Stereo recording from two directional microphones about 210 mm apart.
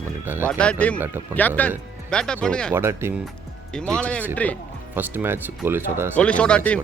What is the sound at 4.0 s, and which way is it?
Speech, 5° left (ahead or behind).